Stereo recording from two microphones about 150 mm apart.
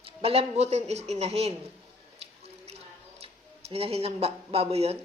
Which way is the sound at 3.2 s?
40° right (ahead or behind).